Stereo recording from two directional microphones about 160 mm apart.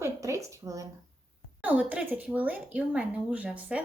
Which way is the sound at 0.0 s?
20° right (ahead or behind).